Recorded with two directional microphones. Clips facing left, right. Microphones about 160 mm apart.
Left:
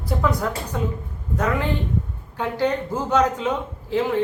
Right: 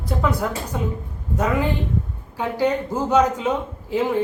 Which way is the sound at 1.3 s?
10° right (ahead or behind).